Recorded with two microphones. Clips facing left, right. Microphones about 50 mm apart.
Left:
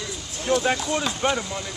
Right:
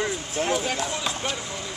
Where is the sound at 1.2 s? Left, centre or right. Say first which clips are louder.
Left 7 dB; left.